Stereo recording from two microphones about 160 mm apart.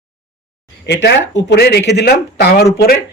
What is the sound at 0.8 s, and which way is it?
A woman's voice, 90° left.